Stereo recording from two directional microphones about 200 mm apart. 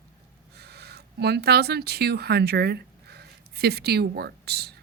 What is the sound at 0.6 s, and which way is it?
Speech, 55° right (ahead or behind).